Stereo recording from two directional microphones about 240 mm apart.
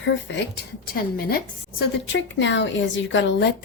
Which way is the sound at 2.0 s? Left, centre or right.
Left.